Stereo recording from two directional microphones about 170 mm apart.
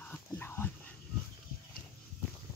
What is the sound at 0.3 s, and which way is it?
Dog, 15° left (ahead or behind).